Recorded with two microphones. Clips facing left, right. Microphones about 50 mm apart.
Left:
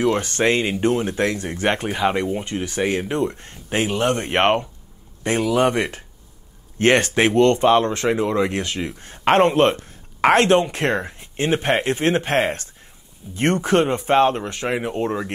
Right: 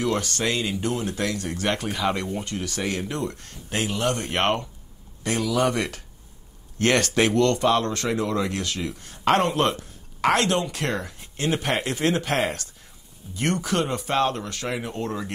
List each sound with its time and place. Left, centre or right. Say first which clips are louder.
0.0 s speech: left 6 dB; left